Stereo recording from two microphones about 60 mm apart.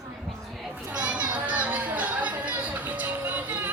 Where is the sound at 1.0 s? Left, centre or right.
Right.